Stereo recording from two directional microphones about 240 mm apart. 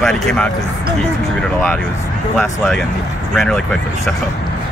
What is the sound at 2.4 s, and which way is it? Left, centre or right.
Speech, centre.